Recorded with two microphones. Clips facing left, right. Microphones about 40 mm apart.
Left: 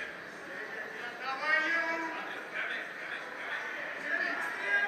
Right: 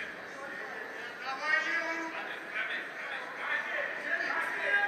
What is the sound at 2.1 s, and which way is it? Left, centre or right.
Music, centre.